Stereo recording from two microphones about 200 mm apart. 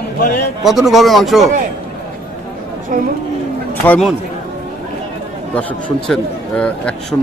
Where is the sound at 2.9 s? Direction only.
45° right (ahead or behind).